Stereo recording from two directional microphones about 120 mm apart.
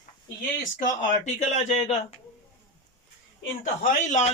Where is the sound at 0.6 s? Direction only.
90° left.